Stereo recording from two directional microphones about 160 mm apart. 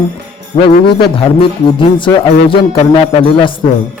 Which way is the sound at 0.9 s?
30° left (ahead or behind).